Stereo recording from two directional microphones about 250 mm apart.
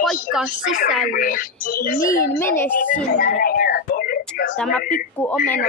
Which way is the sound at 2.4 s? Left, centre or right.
Centre.